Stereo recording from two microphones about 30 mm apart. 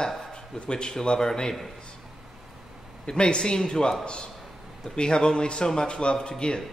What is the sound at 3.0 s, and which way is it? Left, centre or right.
Speech, left.